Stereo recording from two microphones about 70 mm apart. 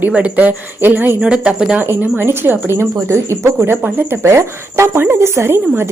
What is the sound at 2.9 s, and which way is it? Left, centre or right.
A woman's voice, right.